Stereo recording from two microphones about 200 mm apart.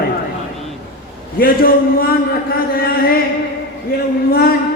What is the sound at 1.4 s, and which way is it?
Speech, 50° left (ahead or behind).